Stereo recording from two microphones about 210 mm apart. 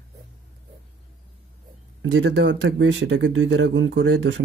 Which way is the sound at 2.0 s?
60° right (ahead or behind).